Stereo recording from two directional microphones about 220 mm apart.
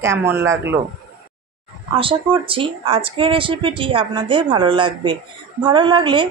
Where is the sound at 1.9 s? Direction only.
25° right (ahead or behind).